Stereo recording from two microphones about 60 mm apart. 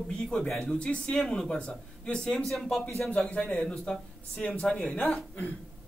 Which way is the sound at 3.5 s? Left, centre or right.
Centre.